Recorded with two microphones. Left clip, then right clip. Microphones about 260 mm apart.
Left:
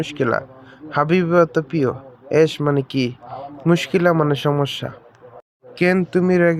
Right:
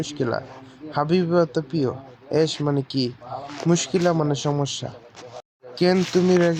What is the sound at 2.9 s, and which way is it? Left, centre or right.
Speech, left.